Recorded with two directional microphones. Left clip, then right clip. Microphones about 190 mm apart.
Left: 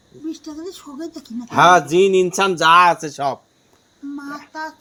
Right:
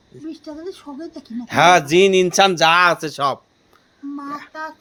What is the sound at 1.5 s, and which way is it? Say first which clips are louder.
Speech: left 1 dB; 40° right (ahead or behind).